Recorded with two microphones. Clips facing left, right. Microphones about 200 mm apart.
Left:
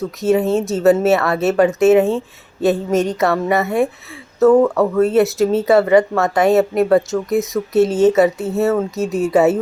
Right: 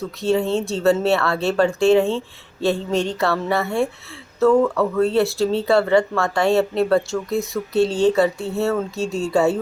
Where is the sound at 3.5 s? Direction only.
20° left (ahead or behind).